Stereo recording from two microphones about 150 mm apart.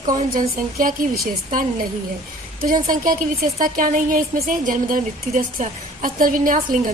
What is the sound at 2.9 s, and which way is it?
A woman's voice, 65° right (ahead or behind).